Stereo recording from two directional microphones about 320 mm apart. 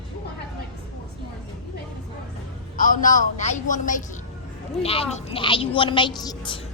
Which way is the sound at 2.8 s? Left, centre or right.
Left.